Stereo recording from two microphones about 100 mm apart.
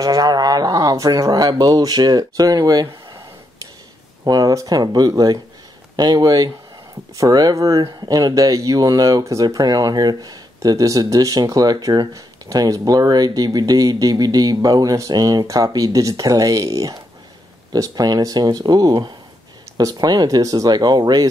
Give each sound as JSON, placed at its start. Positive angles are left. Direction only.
{"t": 0.0, "sound": "speech", "side_deg": -40}
{"t": 4.2, "sound": "speech", "side_deg": -40}